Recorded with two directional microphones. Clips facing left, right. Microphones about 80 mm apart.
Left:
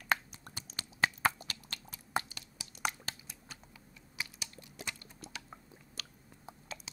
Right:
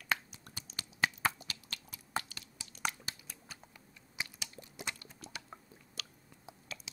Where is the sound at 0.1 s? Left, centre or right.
Left.